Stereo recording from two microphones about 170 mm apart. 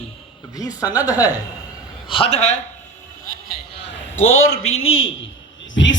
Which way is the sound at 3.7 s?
90° left.